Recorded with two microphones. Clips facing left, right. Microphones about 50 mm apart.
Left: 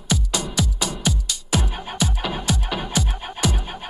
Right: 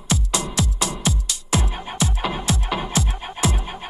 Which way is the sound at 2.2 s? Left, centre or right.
Centre.